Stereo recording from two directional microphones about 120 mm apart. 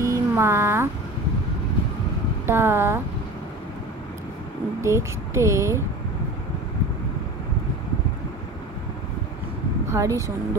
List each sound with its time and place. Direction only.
0.0 s a sound: 25° right (ahead or behind)
2.4 s speech: 20° right (ahead or behind)
4.8 s speech: 25° right (ahead or behind)
9.8 s speech: 25° right (ahead or behind)